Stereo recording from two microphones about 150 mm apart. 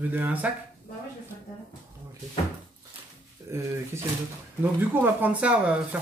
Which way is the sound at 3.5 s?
20° right (ahead or behind).